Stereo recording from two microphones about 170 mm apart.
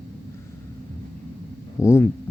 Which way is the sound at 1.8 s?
15° left (ahead or behind).